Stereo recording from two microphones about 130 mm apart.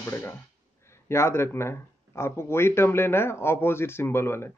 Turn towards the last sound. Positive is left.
turn(degrees=20)  # may be behind; listen again after turning